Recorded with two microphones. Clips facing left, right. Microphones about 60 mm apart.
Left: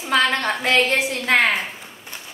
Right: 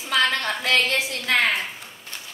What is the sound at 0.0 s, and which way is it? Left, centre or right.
A woman's voice, left.